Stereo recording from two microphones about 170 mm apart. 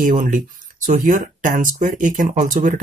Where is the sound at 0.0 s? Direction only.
50° right (ahead or behind).